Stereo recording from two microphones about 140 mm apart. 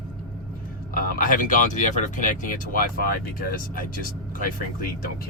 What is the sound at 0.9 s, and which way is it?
Speech, 75° left (ahead or behind).